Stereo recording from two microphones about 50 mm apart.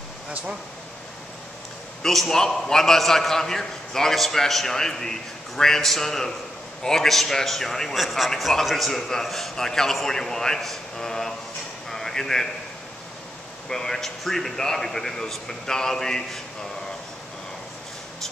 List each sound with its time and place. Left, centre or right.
2.0 s a man's voice: centre
8.0 s a man's voice: centre
11.9 s a sound: centre
13.7 s a man's voice: centre